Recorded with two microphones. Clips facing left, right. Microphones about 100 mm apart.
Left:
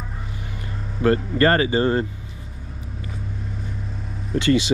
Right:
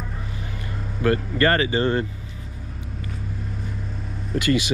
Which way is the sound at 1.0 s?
30° left (ahead or behind).